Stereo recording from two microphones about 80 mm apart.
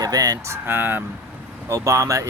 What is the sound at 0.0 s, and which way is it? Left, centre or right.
Speech, right.